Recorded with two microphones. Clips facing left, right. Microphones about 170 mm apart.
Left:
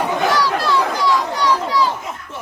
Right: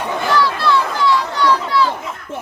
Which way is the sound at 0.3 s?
40° left (ahead or behind).